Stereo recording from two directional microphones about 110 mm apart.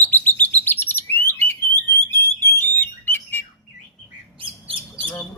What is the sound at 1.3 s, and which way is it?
Alarm, 20° left (ahead or behind).